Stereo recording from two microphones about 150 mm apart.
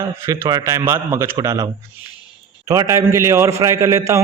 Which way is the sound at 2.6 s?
20° right (ahead or behind).